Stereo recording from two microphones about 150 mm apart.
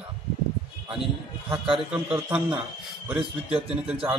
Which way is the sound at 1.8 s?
5° right (ahead or behind).